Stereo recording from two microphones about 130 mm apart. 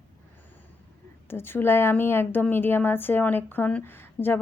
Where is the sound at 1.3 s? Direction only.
15° left (ahead or behind).